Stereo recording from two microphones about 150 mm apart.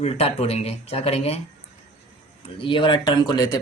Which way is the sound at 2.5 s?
35° left (ahead or behind).